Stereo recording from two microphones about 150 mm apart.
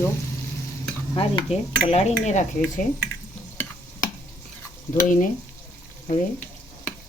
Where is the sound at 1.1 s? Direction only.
30° left (ahead or behind).